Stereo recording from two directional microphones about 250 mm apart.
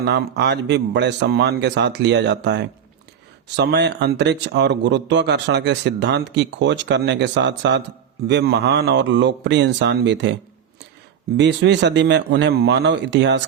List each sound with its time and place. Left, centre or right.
0.0 s speech: right
11.3 s speech: right